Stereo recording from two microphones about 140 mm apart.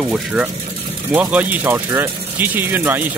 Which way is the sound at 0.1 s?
5° right (ahead or behind).